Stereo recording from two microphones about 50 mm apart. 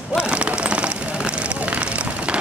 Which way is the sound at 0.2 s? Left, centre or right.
Right.